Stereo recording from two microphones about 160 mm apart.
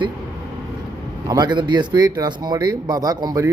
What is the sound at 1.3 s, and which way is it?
Speech, 25° right (ahead or behind).